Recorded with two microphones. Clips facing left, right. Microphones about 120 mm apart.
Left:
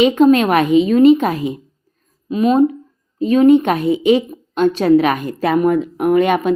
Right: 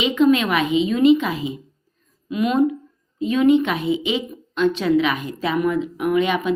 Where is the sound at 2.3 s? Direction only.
35° left (ahead or behind).